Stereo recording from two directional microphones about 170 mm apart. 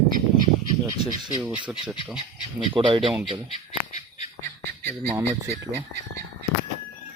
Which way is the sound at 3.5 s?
40° left (ahead or behind).